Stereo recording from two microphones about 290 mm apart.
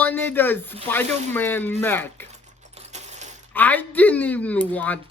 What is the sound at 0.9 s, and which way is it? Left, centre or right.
Speech, centre.